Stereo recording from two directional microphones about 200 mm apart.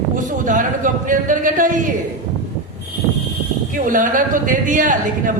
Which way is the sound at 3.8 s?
40° right (ahead or behind).